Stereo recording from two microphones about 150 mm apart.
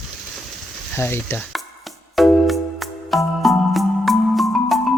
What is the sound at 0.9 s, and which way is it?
Stir, 15° left (ahead or behind).